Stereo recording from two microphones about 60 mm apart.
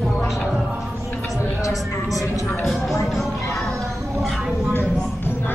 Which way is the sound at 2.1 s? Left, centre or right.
Left.